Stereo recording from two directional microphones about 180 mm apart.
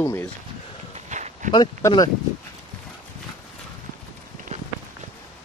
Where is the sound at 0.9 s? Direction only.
40° right (ahead or behind).